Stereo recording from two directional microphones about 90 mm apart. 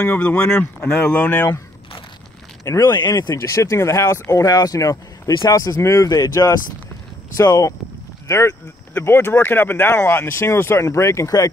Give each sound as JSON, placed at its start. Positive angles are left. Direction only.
{"t": 0.0, "sound": "speech", "side_deg": 15}
{"t": 2.6, "sound": "speech", "side_deg": 35}
{"t": 7.4, "sound": "speech", "side_deg": 45}
{"t": 8.3, "sound": "speech", "side_deg": 30}